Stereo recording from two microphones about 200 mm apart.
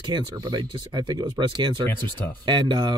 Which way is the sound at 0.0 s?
20° right (ahead or behind).